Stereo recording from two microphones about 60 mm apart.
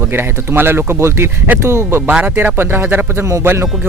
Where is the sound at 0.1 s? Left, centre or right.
Right.